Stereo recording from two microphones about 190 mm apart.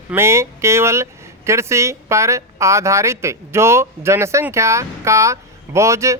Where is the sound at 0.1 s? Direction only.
15° right (ahead or behind).